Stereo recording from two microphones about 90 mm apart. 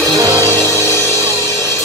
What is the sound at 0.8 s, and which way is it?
Music, 30° left (ahead or behind).